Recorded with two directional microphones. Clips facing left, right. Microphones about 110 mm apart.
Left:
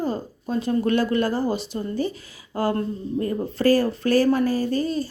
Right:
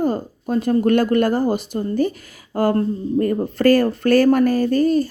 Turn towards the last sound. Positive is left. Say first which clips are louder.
# right 7 dB
turn(degrees=-55)  # may be behind; listen again after turning